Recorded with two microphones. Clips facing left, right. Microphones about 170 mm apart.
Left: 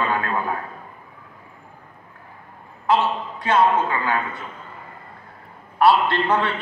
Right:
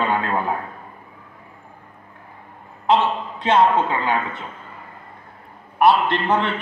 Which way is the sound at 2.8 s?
20° right (ahead or behind).